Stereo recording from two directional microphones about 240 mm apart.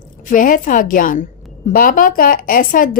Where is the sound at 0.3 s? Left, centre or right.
Left.